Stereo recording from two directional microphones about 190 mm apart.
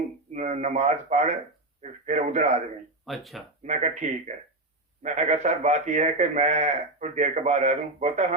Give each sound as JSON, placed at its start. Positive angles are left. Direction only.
{"t": 0.3, "sound": "a man's voice", "side_deg": -40}
{"t": 3.1, "sound": "speech", "side_deg": 0}
{"t": 3.6, "sound": "a man's voice", "side_deg": -40}